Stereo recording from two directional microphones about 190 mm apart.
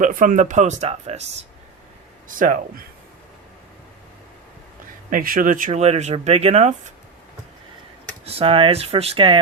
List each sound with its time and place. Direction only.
0.0 s speech: 45° right (ahead or behind)
2.2 s speech: 45° right (ahead or behind)
5.1 s speech: 45° right (ahead or behind)
8.2 s speech: 30° right (ahead or behind)